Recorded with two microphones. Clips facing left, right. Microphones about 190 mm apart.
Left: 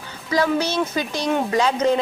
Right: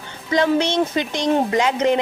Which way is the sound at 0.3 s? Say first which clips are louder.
Right 2 dB; 20° right (ahead or behind).